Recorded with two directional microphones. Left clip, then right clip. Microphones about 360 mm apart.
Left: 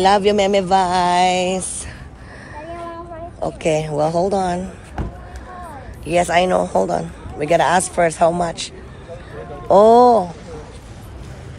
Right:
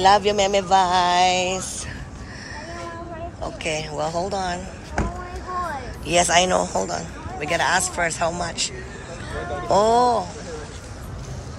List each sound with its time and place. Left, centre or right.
0.0 s music: centre
3.6 s a man's voice: centre
5.0 s basketball bounce: right
6.0 s a man's voice: centre